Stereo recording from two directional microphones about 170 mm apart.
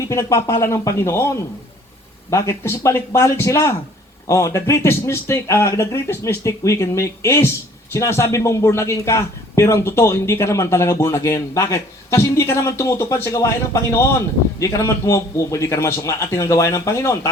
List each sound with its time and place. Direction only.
0.1 s speech: 15° left (ahead or behind)
2.3 s speech: 15° left (ahead or behind)